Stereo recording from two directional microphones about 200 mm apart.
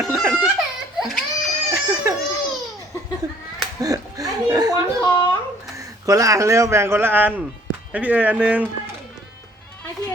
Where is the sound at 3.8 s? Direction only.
20° right (ahead or behind).